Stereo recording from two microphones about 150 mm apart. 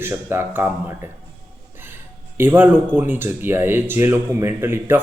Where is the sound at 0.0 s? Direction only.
15° right (ahead or behind).